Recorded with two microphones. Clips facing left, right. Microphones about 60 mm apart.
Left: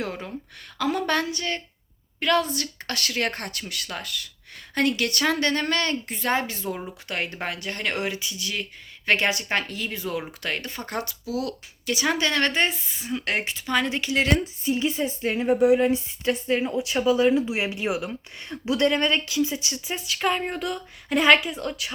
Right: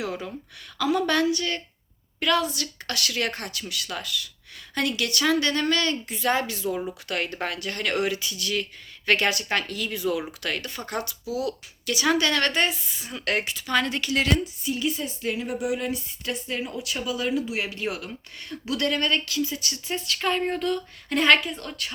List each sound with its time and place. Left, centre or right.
0.0 s a woman's voice: left
7.1 s a woman's voice: left
11.3 s speech: right
11.9 s a woman's voice: left
13.7 s a woman's voice: centre
19.8 s speech: centre